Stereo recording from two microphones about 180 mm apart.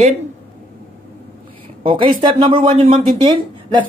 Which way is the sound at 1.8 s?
30° right (ahead or behind).